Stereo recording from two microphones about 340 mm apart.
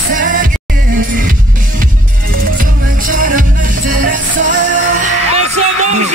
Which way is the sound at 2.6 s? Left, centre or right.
Right.